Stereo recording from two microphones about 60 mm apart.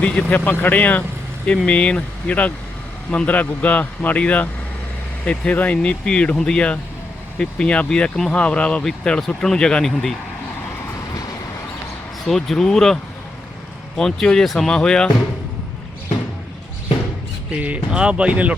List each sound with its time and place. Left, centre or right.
0.0 s a man's voice: left; by 10.2 s centre
12.2 s speech: centre
17.5 s speech: right